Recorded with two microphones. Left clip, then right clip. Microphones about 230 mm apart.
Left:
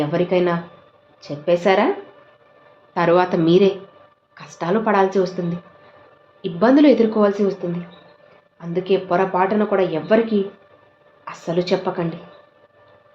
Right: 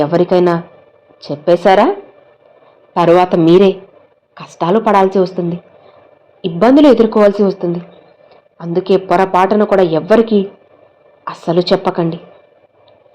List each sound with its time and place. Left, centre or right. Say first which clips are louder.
0.0 s a woman's voice: right 8 dB; right
2.9 s a woman's voice: right 7 dB; right
8.5 s a woman's voice: right 7 dB; right